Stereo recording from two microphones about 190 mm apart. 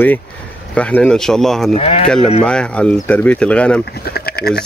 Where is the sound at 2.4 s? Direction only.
5° left (ahead or behind).